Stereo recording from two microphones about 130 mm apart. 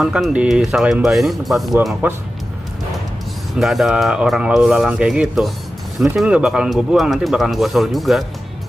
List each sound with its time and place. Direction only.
0.0 s speech: 5° right (ahead or behind)
3.5 s speech: centre (ahead or behind)